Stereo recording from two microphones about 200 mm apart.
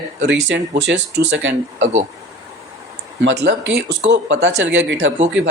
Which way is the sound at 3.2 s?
55° right (ahead or behind).